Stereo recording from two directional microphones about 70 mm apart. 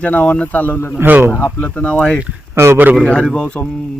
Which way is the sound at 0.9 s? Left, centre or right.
Right.